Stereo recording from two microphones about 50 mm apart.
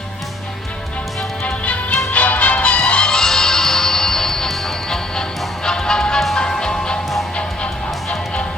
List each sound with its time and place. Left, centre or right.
1.5 s music: left